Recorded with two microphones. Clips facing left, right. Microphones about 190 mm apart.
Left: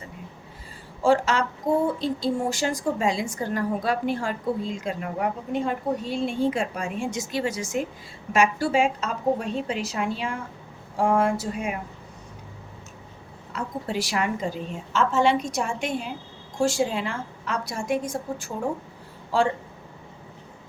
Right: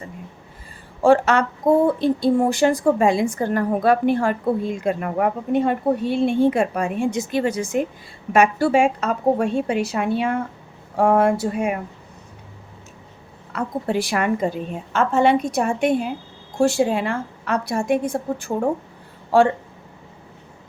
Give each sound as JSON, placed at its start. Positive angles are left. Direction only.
{"t": 1.0, "sound": "speech", "side_deg": -60}
{"t": 13.5, "sound": "speech", "side_deg": -55}